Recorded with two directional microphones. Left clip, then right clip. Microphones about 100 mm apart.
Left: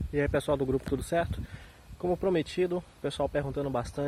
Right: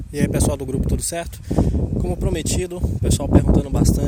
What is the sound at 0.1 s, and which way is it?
Speech, 35° right (ahead or behind).